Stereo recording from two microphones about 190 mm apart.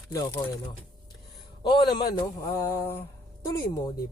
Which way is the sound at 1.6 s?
20° left (ahead or behind).